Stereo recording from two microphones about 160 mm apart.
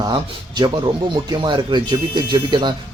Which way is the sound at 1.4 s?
25° right (ahead or behind).